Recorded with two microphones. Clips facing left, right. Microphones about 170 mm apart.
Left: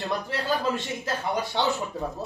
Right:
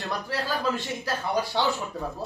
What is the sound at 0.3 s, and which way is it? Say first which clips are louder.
A man's voice: even; 20° left (ahead or behind).